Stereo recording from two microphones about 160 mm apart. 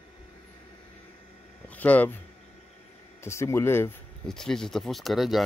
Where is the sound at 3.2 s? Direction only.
15° left (ahead or behind).